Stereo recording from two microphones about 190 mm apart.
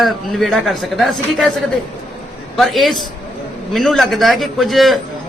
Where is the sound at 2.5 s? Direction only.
Centre (ahead or behind).